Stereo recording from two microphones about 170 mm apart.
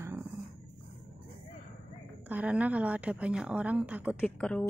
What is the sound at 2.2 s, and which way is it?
Speech, 10° right (ahead or behind).